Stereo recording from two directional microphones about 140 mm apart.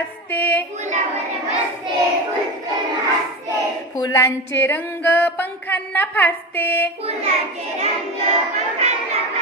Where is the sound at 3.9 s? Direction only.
20° left (ahead or behind).